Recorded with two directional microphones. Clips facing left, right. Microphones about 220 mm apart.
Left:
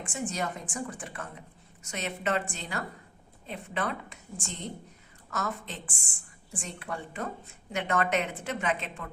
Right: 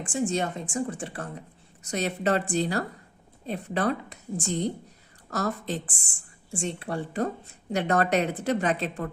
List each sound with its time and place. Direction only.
0.0 s speech: 30° right (ahead or behind)